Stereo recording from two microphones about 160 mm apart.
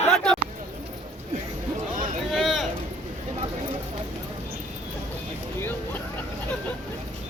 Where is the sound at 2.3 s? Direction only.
Centre (ahead or behind).